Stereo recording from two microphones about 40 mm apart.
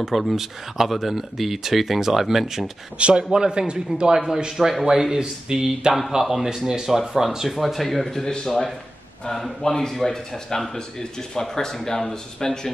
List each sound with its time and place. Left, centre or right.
0.0 s speech: centre
3.0 s a man's voice: right
4.5 s speech: centre